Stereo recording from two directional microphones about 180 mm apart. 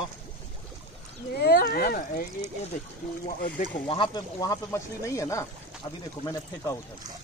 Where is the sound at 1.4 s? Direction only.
60° left (ahead or behind).